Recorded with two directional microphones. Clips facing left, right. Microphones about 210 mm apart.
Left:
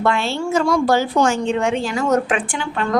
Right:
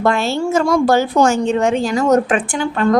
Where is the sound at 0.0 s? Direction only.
40° right (ahead or behind).